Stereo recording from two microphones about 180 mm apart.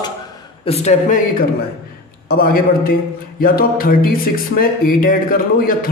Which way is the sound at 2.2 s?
55° left (ahead or behind).